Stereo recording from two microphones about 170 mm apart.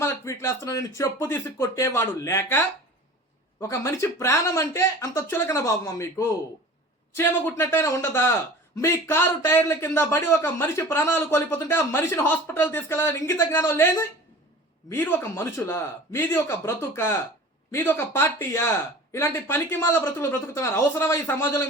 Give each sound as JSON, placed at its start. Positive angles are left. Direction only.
{"t": 0.0, "sound": "a man's voice", "side_deg": 15}